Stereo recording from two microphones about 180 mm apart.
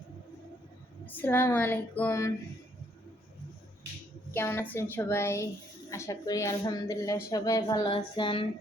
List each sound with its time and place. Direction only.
1.0 s speech: 10° left (ahead or behind)
4.4 s a woman's voice: 15° left (ahead or behind)